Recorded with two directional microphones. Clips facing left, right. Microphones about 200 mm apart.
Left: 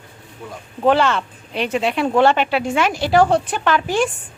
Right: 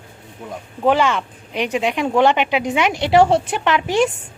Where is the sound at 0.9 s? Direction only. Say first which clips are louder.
Left 1 dB; 10° right (ahead or behind).